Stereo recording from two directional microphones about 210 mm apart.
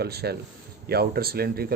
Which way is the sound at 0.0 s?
50° right (ahead or behind).